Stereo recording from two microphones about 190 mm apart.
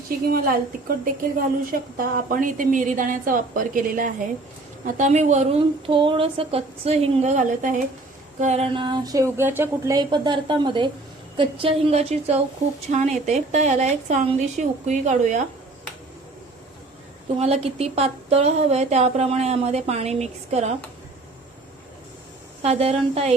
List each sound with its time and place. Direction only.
0.9 s a woman's voice: 50° right (ahead or behind)
17.4 s speech: 30° right (ahead or behind)
22.6 s speech: 35° right (ahead or behind)